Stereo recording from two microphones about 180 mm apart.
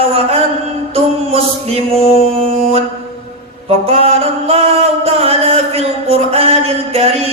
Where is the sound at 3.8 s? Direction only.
35° right (ahead or behind).